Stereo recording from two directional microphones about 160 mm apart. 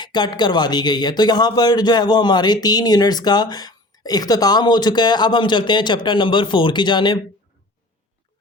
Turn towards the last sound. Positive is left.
turn(degrees=30)  # may be behind; listen again after turning